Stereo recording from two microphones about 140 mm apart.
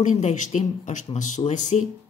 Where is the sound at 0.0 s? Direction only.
60° left (ahead or behind).